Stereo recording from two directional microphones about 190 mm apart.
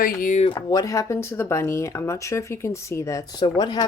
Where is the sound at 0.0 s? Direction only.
45° left (ahead or behind).